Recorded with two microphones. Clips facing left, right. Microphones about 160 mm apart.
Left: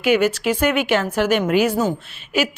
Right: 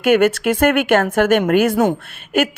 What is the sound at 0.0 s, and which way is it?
A woman's voice, 50° right (ahead or behind).